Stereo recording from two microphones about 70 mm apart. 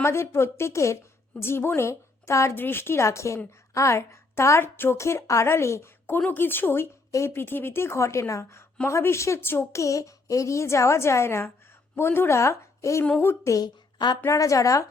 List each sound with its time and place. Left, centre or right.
0.0 s a woman's voice: left
2.6 s a woman's voice: left
7.1 s a woman's voice: left
9.7 s a woman's voice: left
12.4 s a woman's voice: left
13.6 s a woman's voice: left
14.3 s a woman's voice: left